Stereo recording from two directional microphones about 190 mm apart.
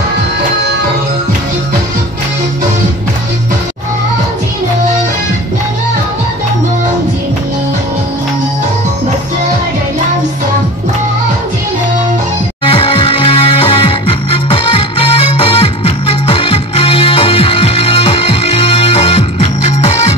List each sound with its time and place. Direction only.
12.6 s music: 30° left (ahead or behind)